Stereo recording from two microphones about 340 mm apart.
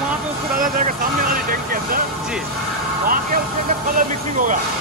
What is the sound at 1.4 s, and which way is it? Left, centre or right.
Speech, right.